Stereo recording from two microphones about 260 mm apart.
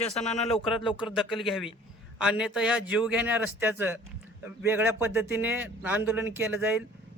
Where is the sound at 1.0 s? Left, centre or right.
Centre.